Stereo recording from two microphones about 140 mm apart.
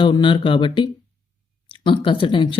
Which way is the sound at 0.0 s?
35° left (ahead or behind).